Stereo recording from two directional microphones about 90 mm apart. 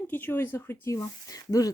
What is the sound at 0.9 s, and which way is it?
Speech, 40° left (ahead or behind).